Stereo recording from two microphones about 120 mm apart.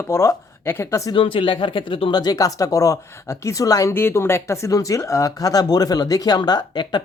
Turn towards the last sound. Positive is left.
turn(degrees=40)  # may be behind; listen again after turning